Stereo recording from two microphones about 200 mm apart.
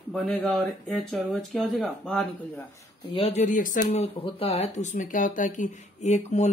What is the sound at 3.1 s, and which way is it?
Speech, 30° left (ahead or behind).